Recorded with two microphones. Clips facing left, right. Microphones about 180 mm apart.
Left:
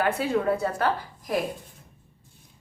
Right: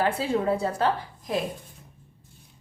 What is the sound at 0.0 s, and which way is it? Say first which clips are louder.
A woman's voice: even; 30° right (ahead or behind).